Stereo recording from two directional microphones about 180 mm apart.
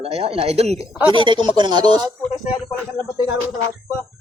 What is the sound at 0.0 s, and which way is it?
Speech, 35° right (ahead or behind).